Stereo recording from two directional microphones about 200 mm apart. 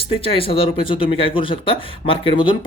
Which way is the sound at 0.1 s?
25° left (ahead or behind).